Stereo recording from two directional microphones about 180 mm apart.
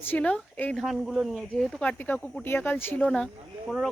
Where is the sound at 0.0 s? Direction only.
10° left (ahead or behind).